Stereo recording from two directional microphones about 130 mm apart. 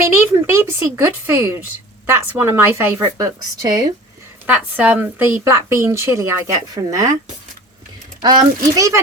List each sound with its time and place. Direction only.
0.0 s a woman's voice: 20° right (ahead or behind)
4.4 s a woman's voice: 10° right (ahead or behind)
8.2 s a woman's voice: 30° right (ahead or behind)